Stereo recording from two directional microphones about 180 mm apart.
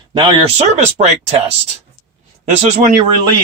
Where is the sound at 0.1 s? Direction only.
25° right (ahead or behind).